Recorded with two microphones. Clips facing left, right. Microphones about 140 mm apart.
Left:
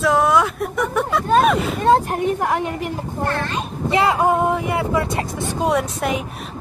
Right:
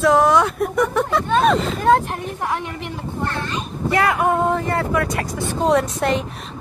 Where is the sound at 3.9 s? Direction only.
20° left (ahead or behind).